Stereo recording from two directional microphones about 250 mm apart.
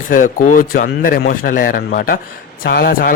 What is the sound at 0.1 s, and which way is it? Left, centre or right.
Speech, left.